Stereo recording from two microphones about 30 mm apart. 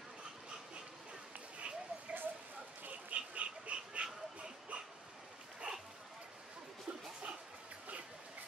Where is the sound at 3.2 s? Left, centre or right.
Right.